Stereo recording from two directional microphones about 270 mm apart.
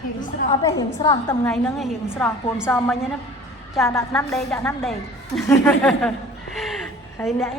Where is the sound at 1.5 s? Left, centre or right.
Centre.